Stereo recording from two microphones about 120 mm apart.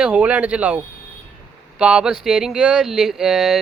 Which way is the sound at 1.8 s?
10° right (ahead or behind).